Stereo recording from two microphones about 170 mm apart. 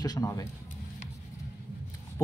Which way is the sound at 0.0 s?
20° left (ahead or behind).